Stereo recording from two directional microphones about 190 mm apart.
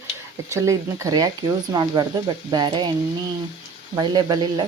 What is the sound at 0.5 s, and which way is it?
Speech, 15° right (ahead or behind).